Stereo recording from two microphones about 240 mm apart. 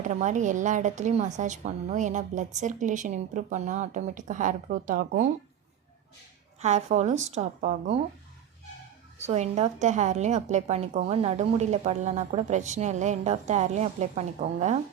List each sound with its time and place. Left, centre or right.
0.0 s speech: right
6.6 s a woman's voice: right
9.1 s a woman's voice: right